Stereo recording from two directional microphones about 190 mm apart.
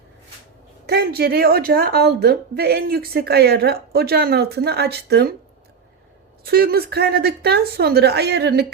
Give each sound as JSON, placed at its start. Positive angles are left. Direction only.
{"t": 0.9, "sound": "a woman's voice", "side_deg": -55}
{"t": 6.4, "sound": "a woman's voice", "side_deg": -55}